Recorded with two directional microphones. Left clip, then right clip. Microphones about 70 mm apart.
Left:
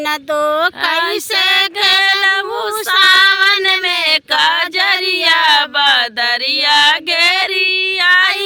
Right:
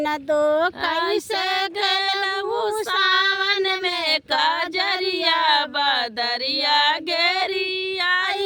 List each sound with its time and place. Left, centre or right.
0.3 s speech: right
1.8 s female singing: centre
2.9 s child singing: left
3.7 s female singing: left